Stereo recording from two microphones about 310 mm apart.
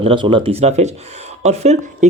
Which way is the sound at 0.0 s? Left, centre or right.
Centre.